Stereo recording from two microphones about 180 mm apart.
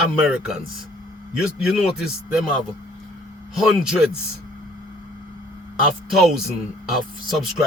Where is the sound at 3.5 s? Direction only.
5° right (ahead or behind).